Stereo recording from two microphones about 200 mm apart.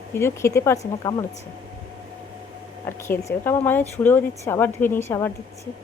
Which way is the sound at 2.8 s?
15° left (ahead or behind).